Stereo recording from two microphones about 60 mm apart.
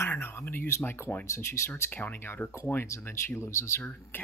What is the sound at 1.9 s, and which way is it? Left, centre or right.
Speech, left.